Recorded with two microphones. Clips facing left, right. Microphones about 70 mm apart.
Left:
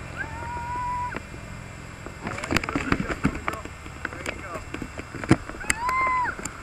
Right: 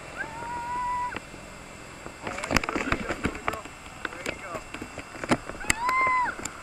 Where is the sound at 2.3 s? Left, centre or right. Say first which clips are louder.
Left 1 dB; centre.